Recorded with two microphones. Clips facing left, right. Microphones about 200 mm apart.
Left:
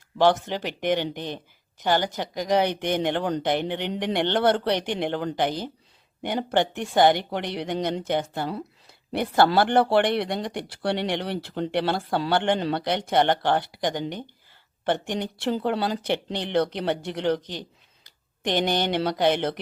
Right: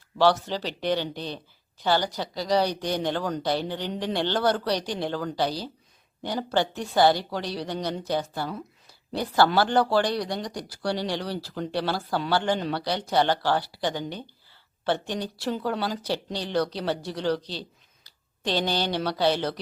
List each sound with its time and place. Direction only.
0.2 s a woman's voice: 20° left (ahead or behind)